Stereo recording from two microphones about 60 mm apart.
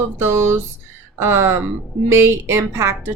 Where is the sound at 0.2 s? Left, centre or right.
Right.